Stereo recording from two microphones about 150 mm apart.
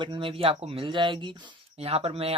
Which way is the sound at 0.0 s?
35° right (ahead or behind).